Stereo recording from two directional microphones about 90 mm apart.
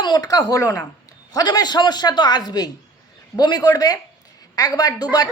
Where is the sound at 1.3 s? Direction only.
50° left (ahead or behind).